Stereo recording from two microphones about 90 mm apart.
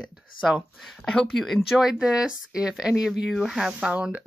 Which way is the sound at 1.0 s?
5° left (ahead or behind).